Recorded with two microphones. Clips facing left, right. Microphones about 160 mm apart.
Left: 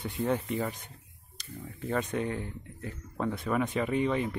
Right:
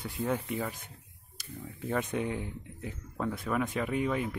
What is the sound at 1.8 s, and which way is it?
Speech, 10° right (ahead or behind).